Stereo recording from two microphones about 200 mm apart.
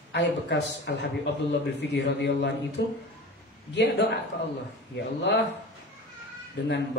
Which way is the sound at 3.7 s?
55° left (ahead or behind).